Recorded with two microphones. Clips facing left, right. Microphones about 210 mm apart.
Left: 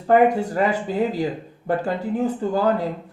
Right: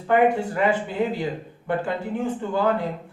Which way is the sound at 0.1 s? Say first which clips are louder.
Left 3 dB; 40° left (ahead or behind).